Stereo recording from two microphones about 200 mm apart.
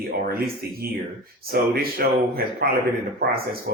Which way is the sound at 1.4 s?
50° right (ahead or behind).